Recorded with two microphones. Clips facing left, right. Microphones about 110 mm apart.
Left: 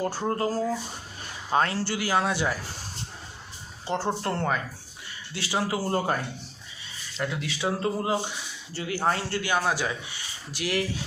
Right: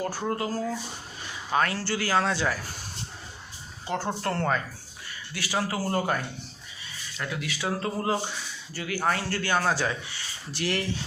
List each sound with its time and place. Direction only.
0.0 s speech: 30° left (ahead or behind)
3.8 s speech: 30° left (ahead or behind)
4.3 s speech: 10° left (ahead or behind)
7.2 s speech: 25° left (ahead or behind)
9.4 s speech: 15° left (ahead or behind)